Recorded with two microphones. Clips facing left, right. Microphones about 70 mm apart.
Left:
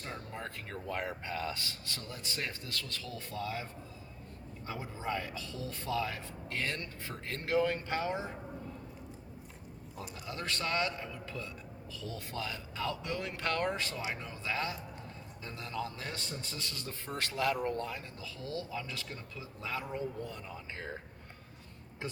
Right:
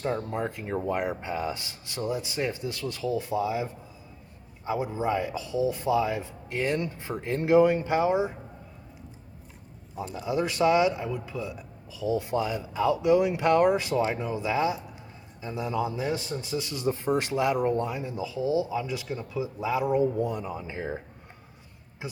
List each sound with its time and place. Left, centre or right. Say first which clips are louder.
0.3 s speech: right 12 dB; centre
10.2 s speech: right 14 dB; centre
22.0 s speech: right 3 dB; centre